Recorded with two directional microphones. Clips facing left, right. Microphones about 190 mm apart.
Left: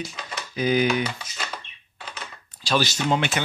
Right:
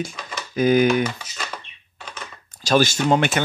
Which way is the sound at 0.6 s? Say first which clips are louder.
Right 5 dB; 50° right (ahead or behind).